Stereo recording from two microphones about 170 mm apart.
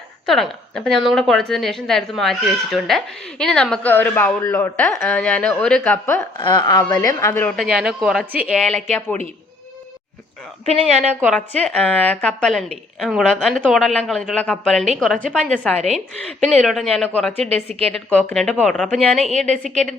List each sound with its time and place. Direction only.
0.3 s a woman's voice: centre (ahead or behind)
6.4 s a woman's voice: 25° left (ahead or behind)
7.5 s a woman's voice: centre (ahead or behind)
9.0 s a woman's voice: 10° left (ahead or behind)
10.7 s a woman's voice: 40° right (ahead or behind)
11.3 s a woman's voice: 5° left (ahead or behind)
17.5 s a woman's voice: 35° right (ahead or behind)
18.1 s a woman's voice: 10° left (ahead or behind)
19.2 s a woman's voice: 40° right (ahead or behind)